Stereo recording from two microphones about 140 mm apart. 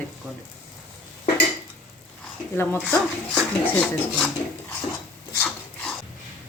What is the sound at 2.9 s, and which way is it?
Speech, 10° left (ahead or behind).